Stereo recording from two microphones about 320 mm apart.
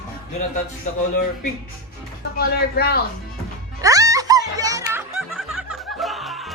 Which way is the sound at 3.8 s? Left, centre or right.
Centre.